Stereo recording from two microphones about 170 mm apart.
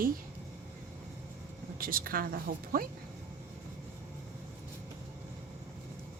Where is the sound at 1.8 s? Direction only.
60° right (ahead or behind).